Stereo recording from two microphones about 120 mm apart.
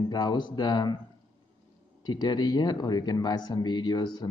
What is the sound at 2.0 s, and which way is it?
Speech, 35° left (ahead or behind).